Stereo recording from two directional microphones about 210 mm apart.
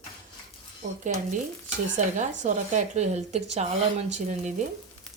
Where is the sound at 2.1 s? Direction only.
35° right (ahead or behind).